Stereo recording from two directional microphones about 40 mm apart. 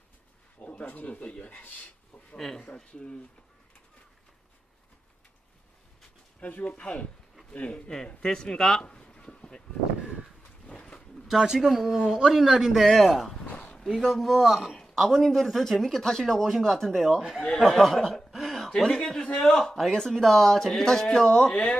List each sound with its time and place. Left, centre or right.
0.6 s speech: left
2.3 s speech: centre
2.7 s speech: left
6.4 s speech: left
6.7 s speech: left
8.0 s speech: centre
10.7 s a sound: left
11.3 s speech: centre
18.3 s a sound: centre
18.7 s speech: left